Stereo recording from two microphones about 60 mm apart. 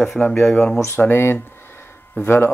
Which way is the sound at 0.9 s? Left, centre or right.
Left.